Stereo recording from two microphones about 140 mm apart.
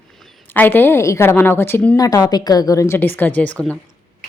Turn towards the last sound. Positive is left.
turn(degrees=10)  # may be behind; listen again after turning